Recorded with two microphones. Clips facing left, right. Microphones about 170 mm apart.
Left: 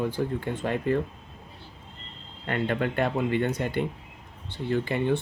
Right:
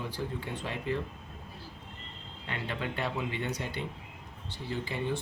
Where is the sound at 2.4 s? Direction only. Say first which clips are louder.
Left 9 dB; 55° left (ahead or behind).